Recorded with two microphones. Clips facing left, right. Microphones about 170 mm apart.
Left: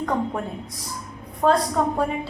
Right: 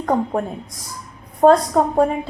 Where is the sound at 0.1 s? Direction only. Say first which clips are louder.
Right 5 dB; 45° right (ahead or behind).